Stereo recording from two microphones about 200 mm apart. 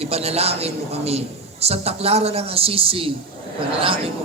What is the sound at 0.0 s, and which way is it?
A man's voice, 30° right (ahead or behind).